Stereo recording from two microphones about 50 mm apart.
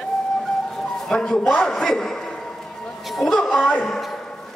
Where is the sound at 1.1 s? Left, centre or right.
Centre.